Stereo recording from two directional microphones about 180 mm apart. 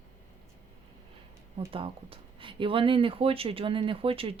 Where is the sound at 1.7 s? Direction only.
30° right (ahead or behind).